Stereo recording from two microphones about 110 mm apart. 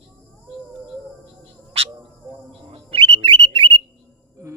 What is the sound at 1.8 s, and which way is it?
Bird, 65° right (ahead or behind).